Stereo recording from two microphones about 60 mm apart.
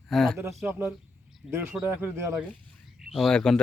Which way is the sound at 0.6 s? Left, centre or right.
Centre.